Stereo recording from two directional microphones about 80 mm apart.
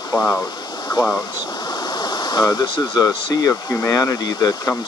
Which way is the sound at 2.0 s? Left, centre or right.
Left.